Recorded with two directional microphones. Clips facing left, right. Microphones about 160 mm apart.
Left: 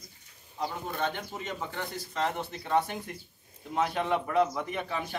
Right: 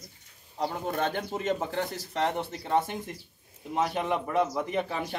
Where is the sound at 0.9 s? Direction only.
45° right (ahead or behind).